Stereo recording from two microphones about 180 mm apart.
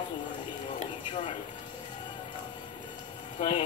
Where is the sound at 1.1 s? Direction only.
25° left (ahead or behind).